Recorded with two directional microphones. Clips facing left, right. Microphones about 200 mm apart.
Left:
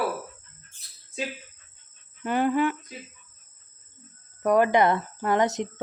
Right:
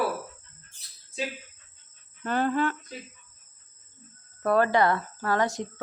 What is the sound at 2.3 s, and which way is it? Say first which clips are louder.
Speech: left 2 dB; 15° left (ahead or behind).